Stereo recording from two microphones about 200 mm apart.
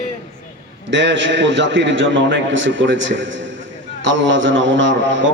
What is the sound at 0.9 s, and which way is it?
A man's voice, 65° right (ahead or behind).